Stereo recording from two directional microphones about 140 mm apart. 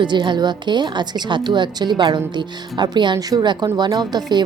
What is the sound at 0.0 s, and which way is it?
A woman's voice, 35° right (ahead or behind).